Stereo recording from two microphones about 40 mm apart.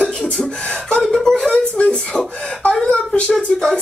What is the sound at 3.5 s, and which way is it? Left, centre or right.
Speech, centre.